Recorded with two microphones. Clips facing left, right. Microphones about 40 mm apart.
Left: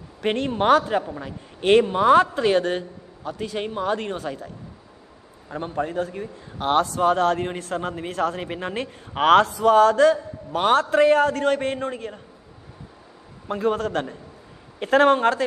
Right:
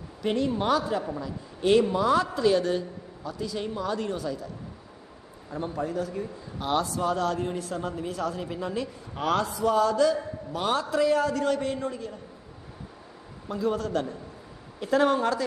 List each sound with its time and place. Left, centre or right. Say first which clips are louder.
0.2 s a man's voice: left 4 dB; left
5.5 s a man's voice: left 3 dB; left
13.5 s a man's voice: left 4 dB; left